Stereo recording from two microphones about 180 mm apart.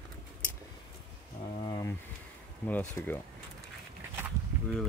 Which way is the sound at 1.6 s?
20° left (ahead or behind).